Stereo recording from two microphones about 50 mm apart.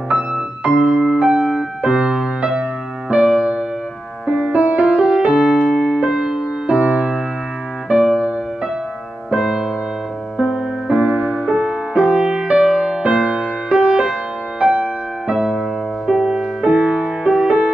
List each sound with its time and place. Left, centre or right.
0.7 s music: centre
4.5 s music: right; by 5.6 s centre
5.7 s keyboard: centre
5.9 s music: centre
7.9 s music: centre
9.3 s music: centre